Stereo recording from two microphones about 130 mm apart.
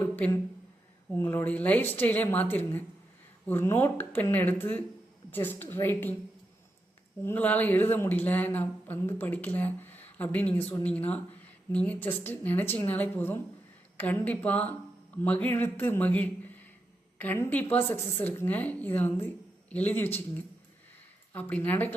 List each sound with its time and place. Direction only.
0.0 s a sound: 15° left (ahead or behind)
1.1 s speech: 20° left (ahead or behind)
7.3 s speech: 15° left (ahead or behind)
21.3 s speech: 15° left (ahead or behind)